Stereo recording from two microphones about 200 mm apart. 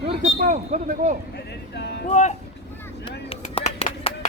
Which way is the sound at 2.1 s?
35° left (ahead or behind).